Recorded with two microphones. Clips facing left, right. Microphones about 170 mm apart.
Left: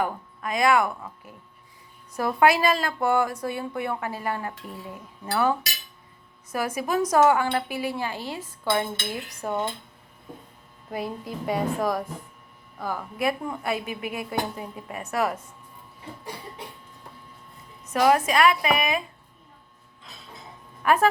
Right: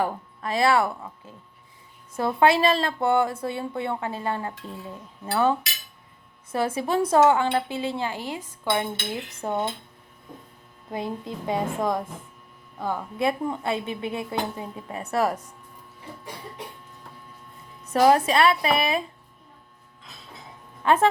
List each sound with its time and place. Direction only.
0.0 s speech: 30° right (ahead or behind)
2.1 s a woman's voice: 25° right (ahead or behind)
10.9 s a woman's voice: 25° right (ahead or behind)
17.9 s a woman's voice: 30° right (ahead or behind)
20.8 s a woman's voice: 25° right (ahead or behind)